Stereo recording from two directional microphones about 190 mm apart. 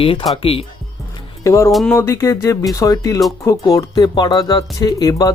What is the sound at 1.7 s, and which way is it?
Speech, centre (ahead or behind).